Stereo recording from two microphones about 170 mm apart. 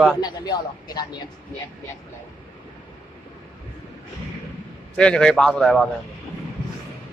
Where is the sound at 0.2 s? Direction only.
25° left (ahead or behind).